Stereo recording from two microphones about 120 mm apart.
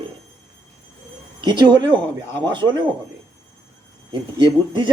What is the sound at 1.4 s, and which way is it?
A man's voice, 40° right (ahead or behind).